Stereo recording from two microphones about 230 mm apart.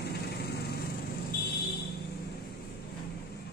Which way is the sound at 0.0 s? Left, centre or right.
Left.